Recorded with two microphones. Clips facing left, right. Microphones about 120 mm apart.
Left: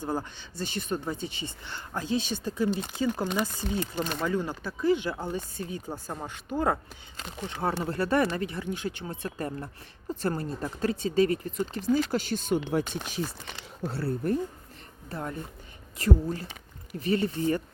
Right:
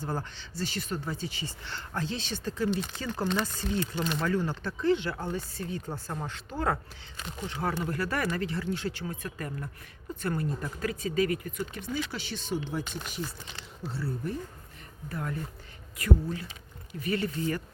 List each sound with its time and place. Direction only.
0.0 s speech: 15° left (ahead or behind)
3.8 s speech: 40° left (ahead or behind)
4.3 s speech: 15° left (ahead or behind); by 13.6 s 80° left
13.8 s speech: 60° left (ahead or behind)
15.1 s speech: 25° left (ahead or behind)